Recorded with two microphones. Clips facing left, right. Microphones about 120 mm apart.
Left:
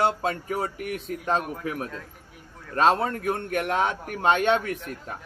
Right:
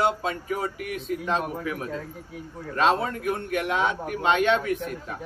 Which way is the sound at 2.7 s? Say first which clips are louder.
Left 1 dB; 45° left (ahead or behind).